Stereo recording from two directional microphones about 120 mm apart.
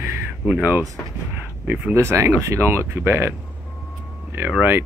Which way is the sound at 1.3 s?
15° right (ahead or behind).